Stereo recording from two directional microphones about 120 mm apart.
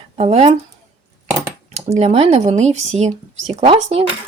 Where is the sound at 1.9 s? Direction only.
65° right (ahead or behind).